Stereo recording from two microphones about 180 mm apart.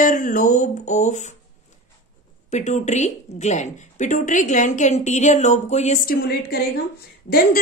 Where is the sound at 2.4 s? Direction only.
40° left (ahead or behind); by 6.6 s 60° left (ahead or behind).